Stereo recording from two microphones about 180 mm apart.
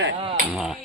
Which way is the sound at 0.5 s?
Centre (ahead or behind).